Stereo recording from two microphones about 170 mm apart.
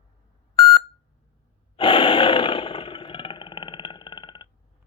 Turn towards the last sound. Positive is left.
turn(degrees=25)  # may be behind; listen again after turning